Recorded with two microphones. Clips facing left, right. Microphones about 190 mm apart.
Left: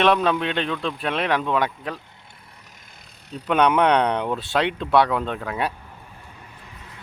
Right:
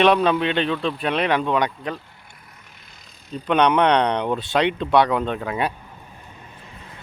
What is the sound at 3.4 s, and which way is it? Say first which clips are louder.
Speech: right 1 dB; 5° left (ahead or behind).